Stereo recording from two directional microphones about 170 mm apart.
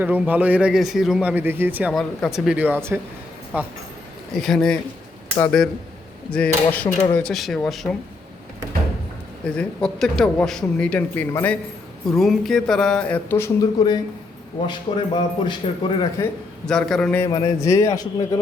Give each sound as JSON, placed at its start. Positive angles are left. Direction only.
{"t": 0.0, "sound": "speech", "side_deg": -10}
{"t": 1.9, "sound": "a man's voice", "side_deg": 0}
{"t": 4.4, "sound": "a man's voice", "side_deg": 0}
{"t": 9.6, "sound": "a man's voice", "side_deg": 5}
{"t": 16.6, "sound": "a man's voice", "side_deg": 5}
{"t": 17.2, "sound": "a man's voice", "side_deg": 20}